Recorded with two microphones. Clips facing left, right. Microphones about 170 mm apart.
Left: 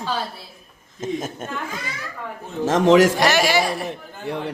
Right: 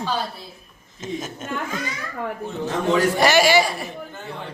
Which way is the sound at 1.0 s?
55° left (ahead or behind).